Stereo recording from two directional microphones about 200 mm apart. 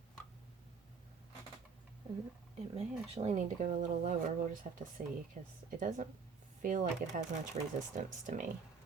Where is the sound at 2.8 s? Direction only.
30° right (ahead or behind).